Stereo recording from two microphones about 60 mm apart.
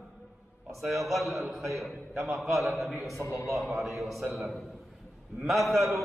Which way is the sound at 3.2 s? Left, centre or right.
Left.